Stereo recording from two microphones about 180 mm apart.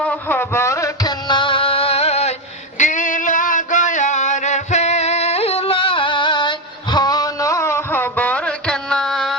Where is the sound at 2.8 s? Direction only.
45° left (ahead or behind).